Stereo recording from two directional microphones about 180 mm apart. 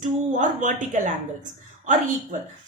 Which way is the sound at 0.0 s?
45° right (ahead or behind).